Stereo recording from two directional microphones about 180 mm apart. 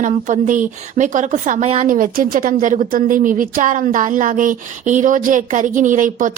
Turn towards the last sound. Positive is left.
turn(degrees=-45)  # may be behind; listen again after turning